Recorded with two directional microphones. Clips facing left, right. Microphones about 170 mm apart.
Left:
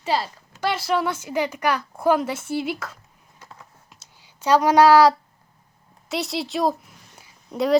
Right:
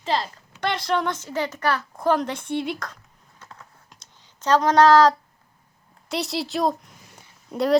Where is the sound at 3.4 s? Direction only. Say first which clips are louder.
Even; 10° left (ahead or behind).